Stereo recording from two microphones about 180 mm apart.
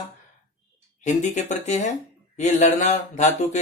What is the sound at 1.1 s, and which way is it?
Speech, 40° left (ahead or behind).